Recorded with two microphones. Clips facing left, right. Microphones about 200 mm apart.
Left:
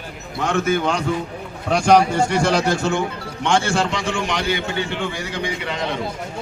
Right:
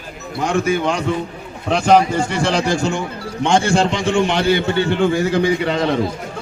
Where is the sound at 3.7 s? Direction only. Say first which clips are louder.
Right 5 dB; 25° right (ahead or behind); by 5.8 s 40° right (ahead or behind).